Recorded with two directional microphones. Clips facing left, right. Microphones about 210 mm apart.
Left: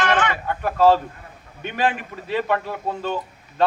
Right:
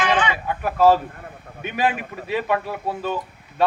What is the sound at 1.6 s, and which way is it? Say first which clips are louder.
A man's voice: even; 10° right (ahead or behind).